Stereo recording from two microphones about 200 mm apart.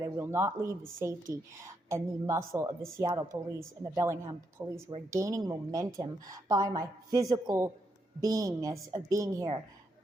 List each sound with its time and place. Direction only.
0.0 s a woman's voice: 15° right (ahead or behind)